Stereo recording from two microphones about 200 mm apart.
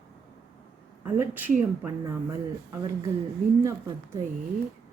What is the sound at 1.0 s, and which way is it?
Speech, 10° right (ahead or behind).